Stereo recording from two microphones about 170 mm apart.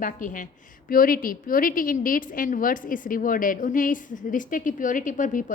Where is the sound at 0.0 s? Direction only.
50° left (ahead or behind).